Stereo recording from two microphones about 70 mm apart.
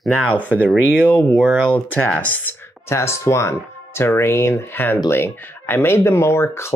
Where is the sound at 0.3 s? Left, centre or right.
Centre.